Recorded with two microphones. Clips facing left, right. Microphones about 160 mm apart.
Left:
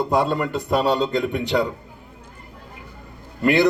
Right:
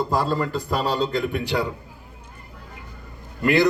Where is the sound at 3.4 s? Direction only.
25° left (ahead or behind).